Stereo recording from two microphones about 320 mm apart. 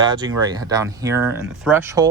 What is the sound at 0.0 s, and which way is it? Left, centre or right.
Speech, centre.